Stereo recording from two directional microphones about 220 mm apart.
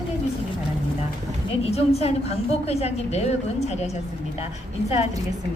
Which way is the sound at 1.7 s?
30° left (ahead or behind).